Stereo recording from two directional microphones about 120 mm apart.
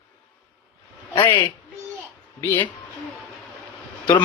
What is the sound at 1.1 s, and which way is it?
Speech, 40° left (ahead or behind).